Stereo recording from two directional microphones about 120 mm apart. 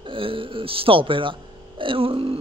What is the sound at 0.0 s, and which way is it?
Speech, 45° right (ahead or behind).